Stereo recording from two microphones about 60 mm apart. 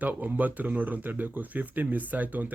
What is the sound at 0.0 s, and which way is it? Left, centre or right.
Speech, right.